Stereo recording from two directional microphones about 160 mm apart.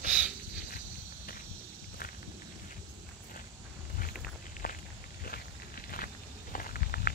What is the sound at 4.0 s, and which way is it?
Walk, 65° left (ahead or behind).